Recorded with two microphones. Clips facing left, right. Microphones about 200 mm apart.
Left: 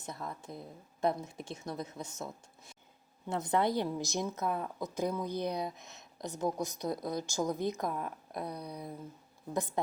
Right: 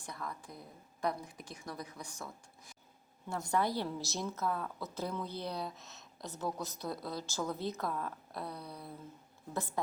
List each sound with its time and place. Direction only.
0.0 s a woman's voice: 25° left (ahead or behind)